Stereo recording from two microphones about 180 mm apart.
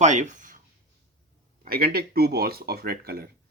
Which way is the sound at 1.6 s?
55° right (ahead or behind).